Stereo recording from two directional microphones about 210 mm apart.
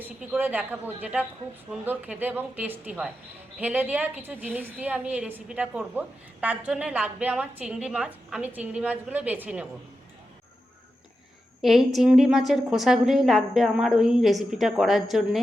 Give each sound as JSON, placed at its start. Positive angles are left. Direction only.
{"t": 0.0, "sound": "a woman's voice", "side_deg": -10}
{"t": 11.6, "sound": "a woman's voice", "side_deg": 0}